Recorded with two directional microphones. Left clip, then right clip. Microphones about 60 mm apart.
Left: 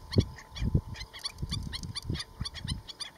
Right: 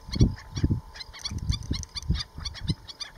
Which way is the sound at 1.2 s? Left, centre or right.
Left.